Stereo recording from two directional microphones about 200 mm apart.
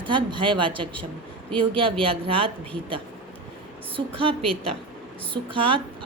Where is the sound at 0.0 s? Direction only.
25° right (ahead or behind).